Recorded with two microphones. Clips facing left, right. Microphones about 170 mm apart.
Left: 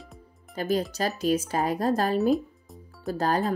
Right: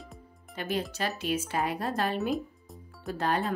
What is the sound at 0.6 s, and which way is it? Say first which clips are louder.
Speech: left 5 dB; 40° left (ahead or behind).